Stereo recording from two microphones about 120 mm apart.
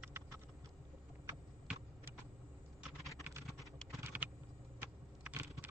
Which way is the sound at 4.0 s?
15° right (ahead or behind).